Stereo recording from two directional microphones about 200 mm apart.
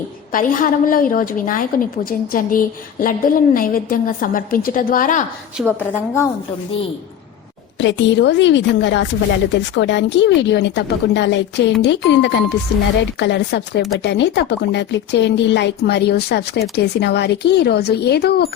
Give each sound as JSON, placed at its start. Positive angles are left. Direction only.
{"t": 0.3, "sound": "a woman's voice", "side_deg": 45}
{"t": 5.5, "sound": "a woman's voice", "side_deg": -5}
{"t": 7.8, "sound": "speech", "side_deg": 65}